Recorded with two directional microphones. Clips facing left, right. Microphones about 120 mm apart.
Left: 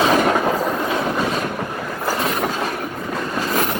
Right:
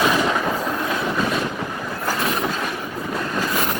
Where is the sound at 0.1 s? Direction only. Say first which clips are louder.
Left 4 dB; 50° left (ahead or behind).